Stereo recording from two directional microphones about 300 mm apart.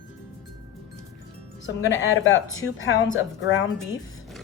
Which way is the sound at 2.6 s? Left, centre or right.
Left.